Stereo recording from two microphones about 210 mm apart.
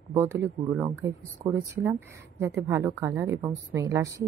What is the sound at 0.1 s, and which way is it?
Speech, 10° right (ahead or behind).